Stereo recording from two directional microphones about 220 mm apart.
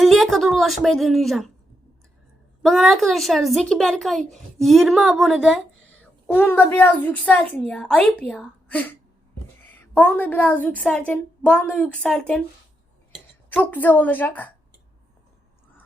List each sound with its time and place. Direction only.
0.0 s a woman's voice: centre (ahead or behind)
2.6 s a child's voice: centre (ahead or behind)